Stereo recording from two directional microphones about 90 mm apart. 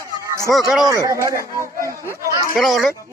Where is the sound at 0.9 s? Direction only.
40° right (ahead or behind).